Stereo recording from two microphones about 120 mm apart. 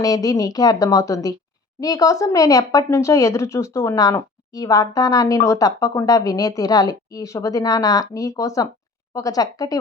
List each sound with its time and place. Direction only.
0.0 s a woman's voice: 30° left (ahead or behind)